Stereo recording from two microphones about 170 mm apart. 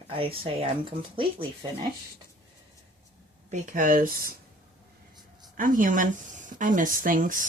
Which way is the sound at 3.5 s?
50° right (ahead or behind).